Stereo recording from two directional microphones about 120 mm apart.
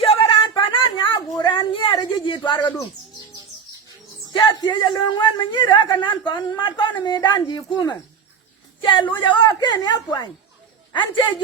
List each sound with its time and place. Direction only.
0.0 s a sound: 50° left (ahead or behind)
4.3 s a man's voice: 40° left (ahead or behind)
8.8 s a woman's voice: 40° left (ahead or behind)